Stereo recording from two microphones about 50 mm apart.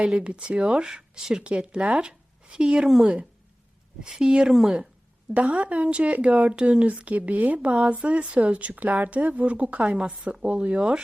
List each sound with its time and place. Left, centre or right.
0.3 s speech: right
2.8 s a woman's voice: centre
4.0 s a woman's voice: centre